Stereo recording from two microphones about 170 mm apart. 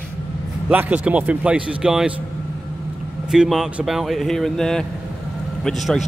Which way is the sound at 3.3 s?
Centre (ahead or behind).